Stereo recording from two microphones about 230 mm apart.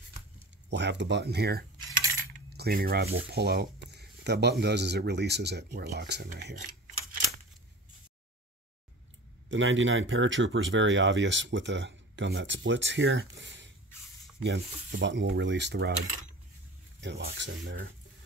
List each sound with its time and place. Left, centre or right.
0.7 s speech: right
9.5 s speech: right
17.0 s speech: right